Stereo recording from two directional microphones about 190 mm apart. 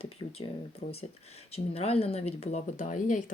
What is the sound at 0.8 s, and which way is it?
Speech, 45° left (ahead or behind).